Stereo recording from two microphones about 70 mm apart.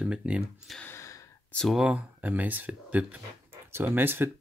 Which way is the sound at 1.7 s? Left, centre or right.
Centre.